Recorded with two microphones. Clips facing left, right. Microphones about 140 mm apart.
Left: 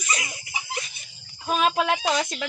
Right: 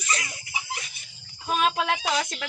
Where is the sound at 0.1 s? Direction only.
15° left (ahead or behind).